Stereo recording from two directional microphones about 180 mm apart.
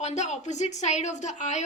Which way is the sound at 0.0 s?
40° left (ahead or behind).